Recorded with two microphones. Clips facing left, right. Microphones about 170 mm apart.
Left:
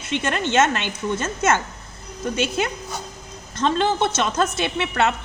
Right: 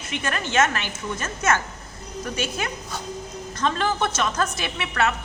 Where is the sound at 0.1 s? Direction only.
25° left (ahead or behind).